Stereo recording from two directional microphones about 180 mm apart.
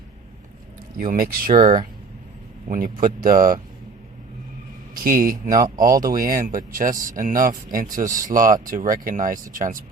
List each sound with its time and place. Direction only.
0.9 s speech: 50° right (ahead or behind)
4.9 s speech: 50° right (ahead or behind)
5.5 s speech: 20° right (ahead or behind)
6.1 s speech: 50° right (ahead or behind)